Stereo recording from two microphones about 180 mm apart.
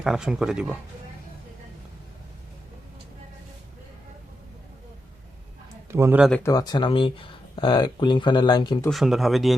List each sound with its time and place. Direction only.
0.0 s speech: centre (ahead or behind)
5.9 s speech: 10° right (ahead or behind)
6.3 s speech: 15° left (ahead or behind)
8.9 s speech: centre (ahead or behind)